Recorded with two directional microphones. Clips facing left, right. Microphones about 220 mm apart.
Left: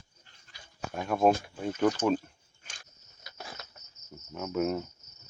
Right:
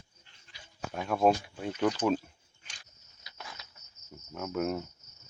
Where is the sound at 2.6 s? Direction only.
45° left (ahead or behind).